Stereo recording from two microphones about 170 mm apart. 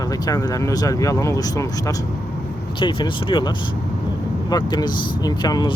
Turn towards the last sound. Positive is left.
turn(degrees=25)  # may be behind; listen again after turning